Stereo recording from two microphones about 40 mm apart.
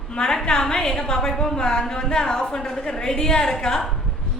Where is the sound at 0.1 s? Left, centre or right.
Left.